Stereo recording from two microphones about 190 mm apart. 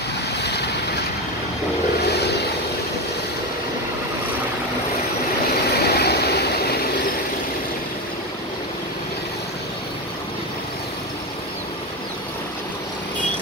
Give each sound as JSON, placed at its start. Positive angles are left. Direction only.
{"t": 5.7, "sound": "vehicle", "side_deg": 55}